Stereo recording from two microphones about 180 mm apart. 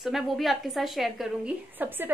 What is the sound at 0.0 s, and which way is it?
A woman's voice, centre (ahead or behind).